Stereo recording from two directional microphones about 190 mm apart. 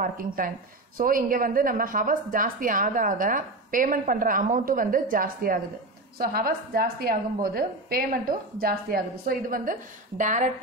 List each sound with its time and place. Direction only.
0.0 s a woman's voice: 45° right (ahead or behind)